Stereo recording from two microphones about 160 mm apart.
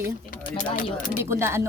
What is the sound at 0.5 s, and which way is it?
Speech, 55° left (ahead or behind).